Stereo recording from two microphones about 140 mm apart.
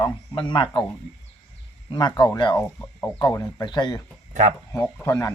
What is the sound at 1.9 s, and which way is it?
Speech, 30° left (ahead or behind).